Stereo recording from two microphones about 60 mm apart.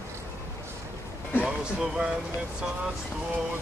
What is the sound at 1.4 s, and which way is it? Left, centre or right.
Speech, centre.